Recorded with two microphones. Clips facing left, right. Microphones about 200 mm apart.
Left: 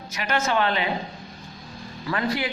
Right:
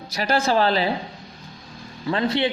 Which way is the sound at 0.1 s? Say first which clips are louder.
Right 4 dB; 35° right (ahead or behind).